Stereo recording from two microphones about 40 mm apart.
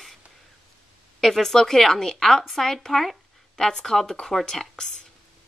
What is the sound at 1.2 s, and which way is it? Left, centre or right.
A woman's voice, centre.